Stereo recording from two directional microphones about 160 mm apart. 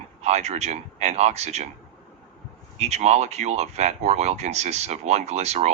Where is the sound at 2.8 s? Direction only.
45° right (ahead or behind).